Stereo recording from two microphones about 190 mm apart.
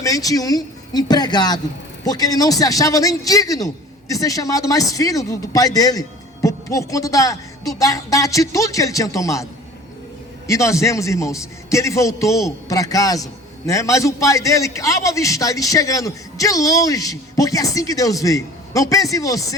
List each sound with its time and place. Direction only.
0.0 s a man's voice: 20° left (ahead or behind)